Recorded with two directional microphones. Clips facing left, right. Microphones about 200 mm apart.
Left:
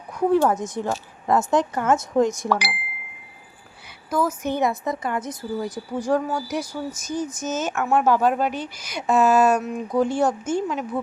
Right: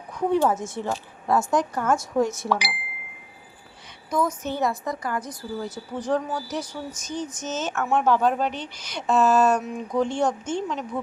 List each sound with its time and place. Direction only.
0.1 s a sound: 10° left (ahead or behind)
0.5 s a woman's voice: 15° left (ahead or behind)
2.5 s speech: centre (ahead or behind)
4.1 s speech: 5° left (ahead or behind)
4.4 s a woman's voice: 20° left (ahead or behind)